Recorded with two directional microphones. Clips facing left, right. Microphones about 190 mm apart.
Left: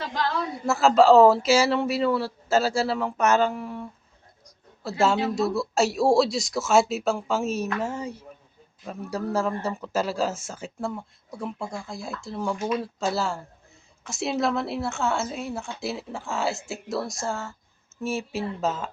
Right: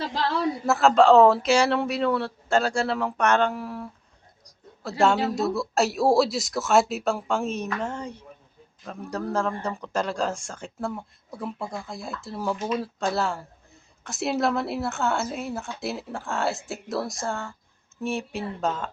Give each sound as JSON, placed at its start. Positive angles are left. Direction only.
{"t": 0.6, "sound": "speech", "side_deg": 0}